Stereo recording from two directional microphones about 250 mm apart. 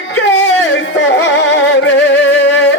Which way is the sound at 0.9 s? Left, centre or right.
Left.